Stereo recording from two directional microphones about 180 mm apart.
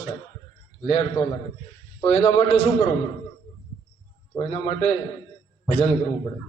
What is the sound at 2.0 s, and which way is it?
Speech, 30° left (ahead or behind).